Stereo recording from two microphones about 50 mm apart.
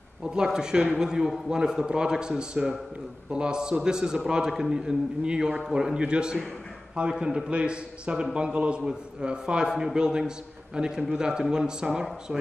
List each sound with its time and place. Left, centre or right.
0.2 s a man's voice: centre